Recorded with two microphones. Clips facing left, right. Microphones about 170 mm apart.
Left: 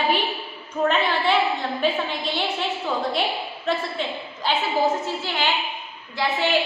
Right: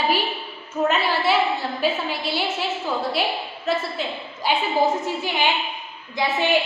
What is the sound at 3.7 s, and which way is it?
A woman's voice, centre (ahead or behind).